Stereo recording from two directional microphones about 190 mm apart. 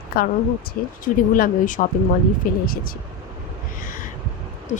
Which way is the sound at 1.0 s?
45° left (ahead or behind).